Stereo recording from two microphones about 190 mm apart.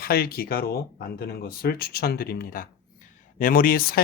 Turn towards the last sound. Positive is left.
turn(degrees=50)  # may be behind; listen again after turning